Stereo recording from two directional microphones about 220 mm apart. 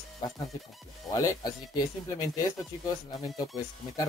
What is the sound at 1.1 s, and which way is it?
Speech, 15° left (ahead or behind).